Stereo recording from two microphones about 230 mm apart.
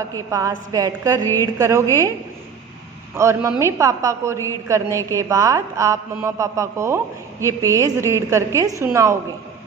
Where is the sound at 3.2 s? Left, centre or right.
Centre.